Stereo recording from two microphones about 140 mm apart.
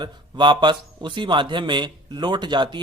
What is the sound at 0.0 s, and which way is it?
Speech, 35° right (ahead or behind).